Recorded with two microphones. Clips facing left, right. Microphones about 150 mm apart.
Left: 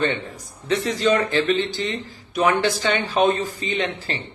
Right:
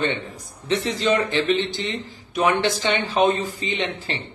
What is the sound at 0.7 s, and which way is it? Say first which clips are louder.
A man's voice: left 1 dB; 20° right (ahead or behind).